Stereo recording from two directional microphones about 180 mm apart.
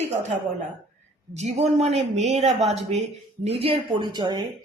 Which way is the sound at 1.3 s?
40° right (ahead or behind).